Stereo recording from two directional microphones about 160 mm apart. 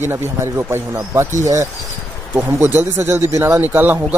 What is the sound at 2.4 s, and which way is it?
A man's voice, 15° right (ahead or behind).